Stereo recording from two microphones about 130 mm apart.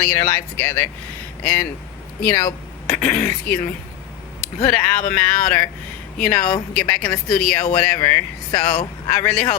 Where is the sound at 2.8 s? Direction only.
15° left (ahead or behind).